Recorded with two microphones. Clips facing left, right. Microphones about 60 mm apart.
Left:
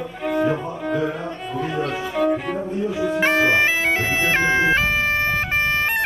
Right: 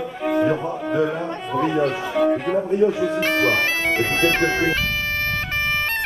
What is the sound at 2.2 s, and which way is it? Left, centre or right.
Cello, centre.